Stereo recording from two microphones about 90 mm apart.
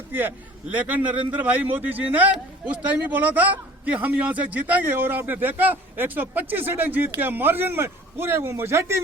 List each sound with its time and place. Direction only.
0.1 s a man's voice: 20° right (ahead or behind)